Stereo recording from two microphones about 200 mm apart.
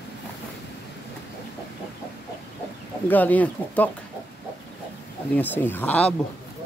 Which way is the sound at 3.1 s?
10° left (ahead or behind).